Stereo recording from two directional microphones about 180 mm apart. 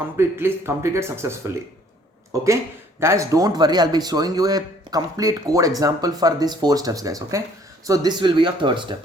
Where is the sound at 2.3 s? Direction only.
15° right (ahead or behind).